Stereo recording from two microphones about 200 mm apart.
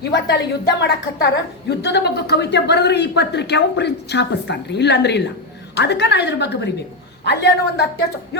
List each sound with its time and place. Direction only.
0.0 s a woman's voice: 55° left (ahead or behind)